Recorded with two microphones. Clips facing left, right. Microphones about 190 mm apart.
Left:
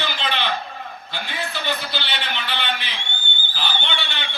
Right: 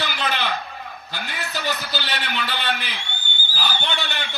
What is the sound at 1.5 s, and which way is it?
A man's voice, 40° right (ahead or behind).